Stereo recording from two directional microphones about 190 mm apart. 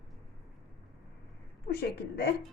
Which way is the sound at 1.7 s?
55° left (ahead or behind).